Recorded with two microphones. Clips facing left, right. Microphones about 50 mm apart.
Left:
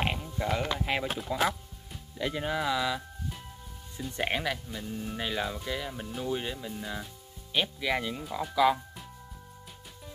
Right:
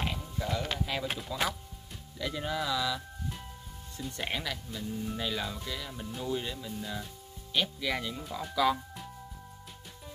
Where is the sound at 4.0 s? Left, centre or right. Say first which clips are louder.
Left 4 dB; left.